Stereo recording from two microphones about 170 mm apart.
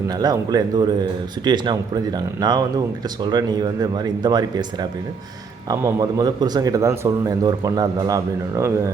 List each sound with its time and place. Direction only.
0.1 s a man's voice: 25° right (ahead or behind)